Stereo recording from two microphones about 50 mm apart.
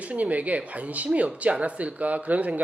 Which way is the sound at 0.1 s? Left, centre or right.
Right.